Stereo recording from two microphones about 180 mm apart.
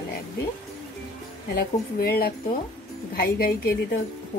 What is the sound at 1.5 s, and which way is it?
A woman's voice, 55° left (ahead or behind).